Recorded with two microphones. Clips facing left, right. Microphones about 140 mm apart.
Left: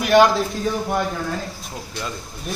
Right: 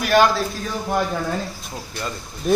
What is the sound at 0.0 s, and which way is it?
Speech, 20° left (ahead or behind).